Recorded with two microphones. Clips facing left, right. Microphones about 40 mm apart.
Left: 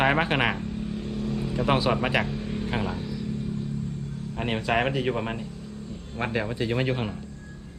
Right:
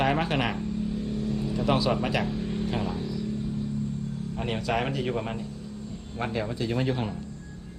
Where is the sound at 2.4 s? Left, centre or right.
Left.